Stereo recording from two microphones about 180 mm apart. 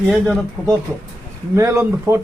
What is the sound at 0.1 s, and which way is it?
Speech, 5° left (ahead or behind).